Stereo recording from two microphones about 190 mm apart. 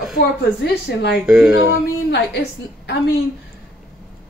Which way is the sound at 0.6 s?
60° left (ahead or behind).